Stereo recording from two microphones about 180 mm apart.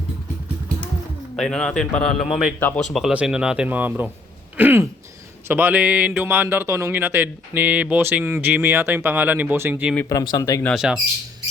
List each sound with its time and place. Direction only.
1.4 s speech: 5° left (ahead or behind); by 9.9 s 10° right (ahead or behind)
9.9 s speech: 15° left (ahead or behind)
10.7 s speech: 5° right (ahead or behind)